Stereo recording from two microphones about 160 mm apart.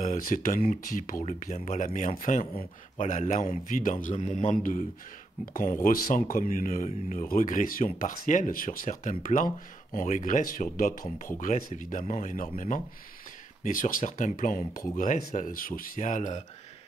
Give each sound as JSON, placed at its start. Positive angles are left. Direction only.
{"t": 0.0, "sound": "speech", "side_deg": 55}